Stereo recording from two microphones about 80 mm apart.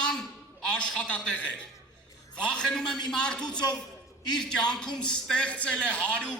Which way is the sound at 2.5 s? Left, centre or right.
Centre.